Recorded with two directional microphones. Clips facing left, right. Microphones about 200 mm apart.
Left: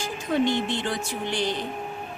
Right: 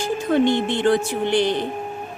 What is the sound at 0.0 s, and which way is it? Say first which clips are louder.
A woman's voice: right 6 dB; 55° right (ahead or behind).